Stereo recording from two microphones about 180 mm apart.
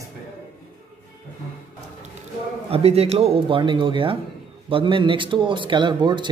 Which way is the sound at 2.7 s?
35° right (ahead or behind).